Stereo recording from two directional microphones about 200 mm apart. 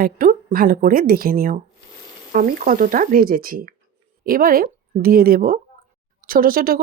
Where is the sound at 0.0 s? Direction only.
45° right (ahead or behind).